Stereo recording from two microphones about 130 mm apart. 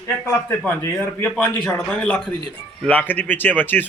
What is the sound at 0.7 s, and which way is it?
Speech, 15° left (ahead or behind).